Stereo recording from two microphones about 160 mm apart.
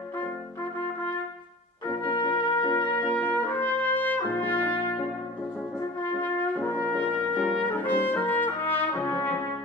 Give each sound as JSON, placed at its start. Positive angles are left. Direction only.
{"t": 2.0, "sound": "music", "side_deg": 30}
{"t": 3.1, "sound": "trumpet", "side_deg": 10}
{"t": 6.1, "sound": "brass instrument", "side_deg": 10}
{"t": 7.0, "sound": "trumpet", "side_deg": 10}